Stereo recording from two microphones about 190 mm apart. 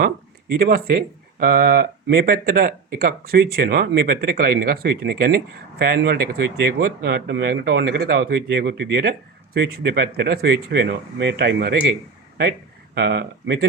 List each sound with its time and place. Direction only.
0.6 s speech: 50° right (ahead or behind)